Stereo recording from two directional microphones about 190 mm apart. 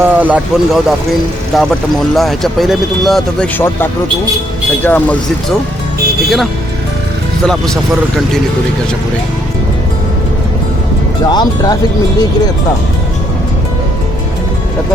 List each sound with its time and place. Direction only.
0.0 s speech: 10° right (ahead or behind)
11.2 s speech: 20° left (ahead or behind)